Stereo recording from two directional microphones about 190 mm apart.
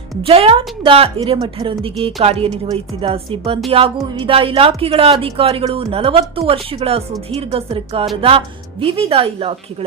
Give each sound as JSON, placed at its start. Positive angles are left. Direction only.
{"t": 0.2, "sound": "a woman's voice", "side_deg": -30}